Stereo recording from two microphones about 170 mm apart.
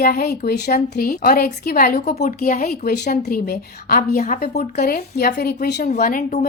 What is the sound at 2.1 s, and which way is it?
Speech, 45° left (ahead or behind).